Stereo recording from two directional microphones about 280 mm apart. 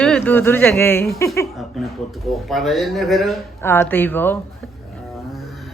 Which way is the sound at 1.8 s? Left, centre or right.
Centre.